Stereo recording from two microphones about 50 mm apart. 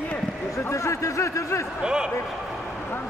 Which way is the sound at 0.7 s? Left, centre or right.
Left.